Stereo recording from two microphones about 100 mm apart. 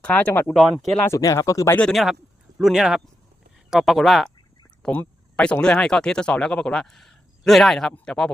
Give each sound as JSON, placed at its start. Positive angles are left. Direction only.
{"t": 0.0, "sound": "speech", "side_deg": 15}
{"t": 0.5, "sound": "speech", "side_deg": 0}
{"t": 1.0, "sound": "speech", "side_deg": 30}
{"t": 1.9, "sound": "speech", "side_deg": 0}
{"t": 4.8, "sound": "speech", "side_deg": 10}